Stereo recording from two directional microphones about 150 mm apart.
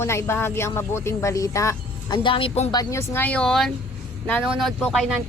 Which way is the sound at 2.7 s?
25° left (ahead or behind).